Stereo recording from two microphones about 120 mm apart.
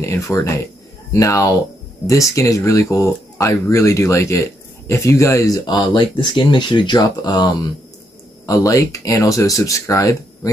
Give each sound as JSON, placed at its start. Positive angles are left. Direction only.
{"t": 0.0, "sound": "speech", "side_deg": 25}